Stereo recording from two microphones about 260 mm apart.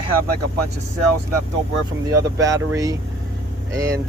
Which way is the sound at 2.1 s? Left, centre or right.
Centre.